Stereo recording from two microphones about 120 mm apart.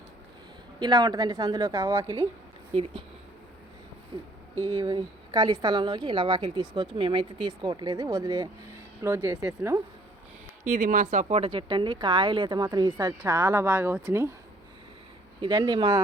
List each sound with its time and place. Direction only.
0.8 s speech: 35° right (ahead or behind)
4.1 s speech: 45° right (ahead or behind)
9.0 s speech: 20° right (ahead or behind)
10.6 s speech: 90° right; by 14.3 s 20° right (ahead or behind)
15.4 s speech: 40° right (ahead or behind)